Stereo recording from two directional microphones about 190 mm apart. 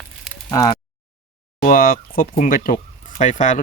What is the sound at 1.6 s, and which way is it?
Speech, 50° left (ahead or behind).